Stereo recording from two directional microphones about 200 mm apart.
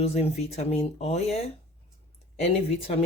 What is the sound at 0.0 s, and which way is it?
Speech, 30° left (ahead or behind).